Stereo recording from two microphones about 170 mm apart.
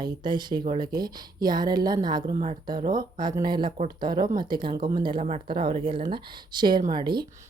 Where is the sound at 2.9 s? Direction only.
25° right (ahead or behind).